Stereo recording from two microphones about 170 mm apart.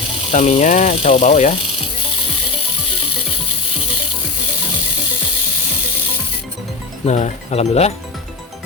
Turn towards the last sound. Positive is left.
turn(degrees=40)  # may be behind; listen again after turning